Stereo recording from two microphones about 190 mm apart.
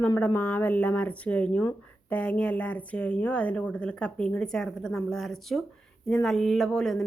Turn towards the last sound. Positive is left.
turn(degrees=5)  # may be behind; listen again after turning